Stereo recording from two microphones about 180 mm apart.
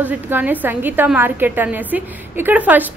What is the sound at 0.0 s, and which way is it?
A woman's voice, 10° right (ahead or behind).